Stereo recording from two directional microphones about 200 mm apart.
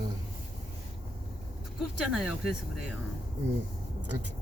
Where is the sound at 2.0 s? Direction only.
Centre (ahead or behind).